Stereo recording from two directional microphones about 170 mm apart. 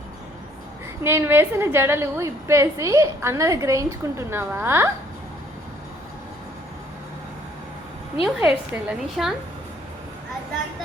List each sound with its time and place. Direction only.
1.0 s a woman's voice: 15° right (ahead or behind)
8.2 s a woman's voice: 5° right (ahead or behind)